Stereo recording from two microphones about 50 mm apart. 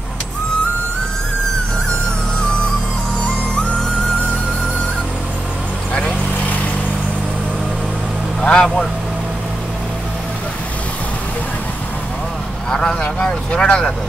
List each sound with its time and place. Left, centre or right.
3.2 s music: left
8.4 s vehicle: centre
12.6 s vehicle: centre